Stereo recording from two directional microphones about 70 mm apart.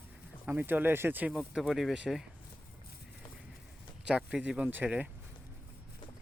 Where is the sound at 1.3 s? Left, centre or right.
Centre.